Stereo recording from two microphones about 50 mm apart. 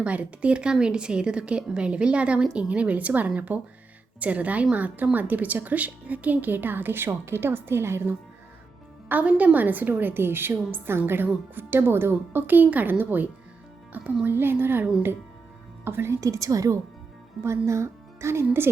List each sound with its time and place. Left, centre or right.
0.0 s speech: right
9.2 s speech: right
13.9 s speech: right
14.3 s speech: right
16.3 s a woman's voice: right
17.7 s speech: right